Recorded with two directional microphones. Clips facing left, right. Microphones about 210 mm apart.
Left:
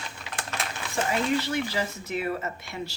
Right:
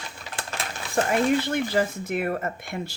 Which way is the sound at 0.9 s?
55° right (ahead or behind).